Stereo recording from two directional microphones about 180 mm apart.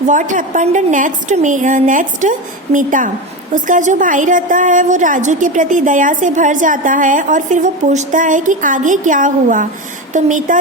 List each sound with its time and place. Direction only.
0.1 s a woman's voice: 45° right (ahead or behind)